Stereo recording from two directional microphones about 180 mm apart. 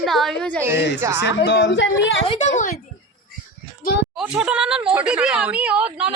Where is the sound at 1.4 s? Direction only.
85° left.